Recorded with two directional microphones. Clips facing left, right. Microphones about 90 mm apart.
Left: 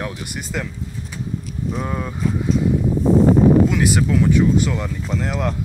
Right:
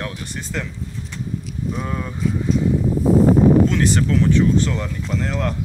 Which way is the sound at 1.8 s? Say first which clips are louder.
Left 1 dB; 15° left (ahead or behind).